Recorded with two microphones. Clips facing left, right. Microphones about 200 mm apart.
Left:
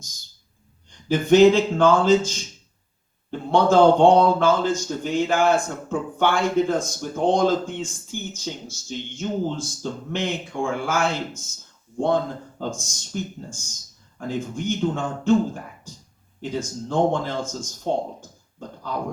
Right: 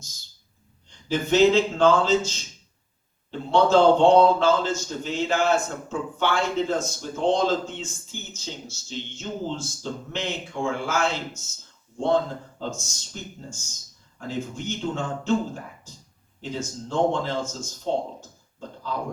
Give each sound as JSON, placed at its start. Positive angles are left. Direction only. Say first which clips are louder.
{"t": 0.9, "sound": "speech", "louder": "left 6 dB", "side_deg": 50}
{"t": 3.5, "sound": "speech", "louder": "left 2 dB", "side_deg": 50}
{"t": 14.2, "sound": "speech", "louder": "left 3 dB", "side_deg": 50}
{"t": 16.4, "sound": "speech", "louder": "left 3 dB", "side_deg": 55}